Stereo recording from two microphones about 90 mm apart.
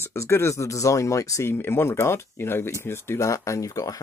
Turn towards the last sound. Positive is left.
turn(degrees=40)  # may be behind; listen again after turning